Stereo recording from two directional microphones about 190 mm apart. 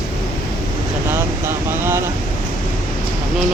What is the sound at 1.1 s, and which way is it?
Speech, 10° right (ahead or behind).